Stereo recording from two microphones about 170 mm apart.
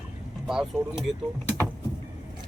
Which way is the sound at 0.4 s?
5° right (ahead or behind).